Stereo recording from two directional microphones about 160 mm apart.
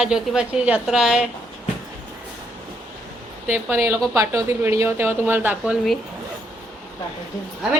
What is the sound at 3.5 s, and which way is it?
Speech, 15° right (ahead or behind).